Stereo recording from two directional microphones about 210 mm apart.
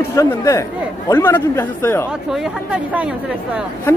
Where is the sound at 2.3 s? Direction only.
5° right (ahead or behind).